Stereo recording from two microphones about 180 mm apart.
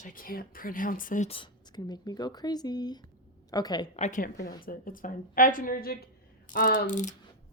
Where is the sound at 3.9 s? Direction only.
40° left (ahead or behind); by 6.1 s 60° left (ahead or behind).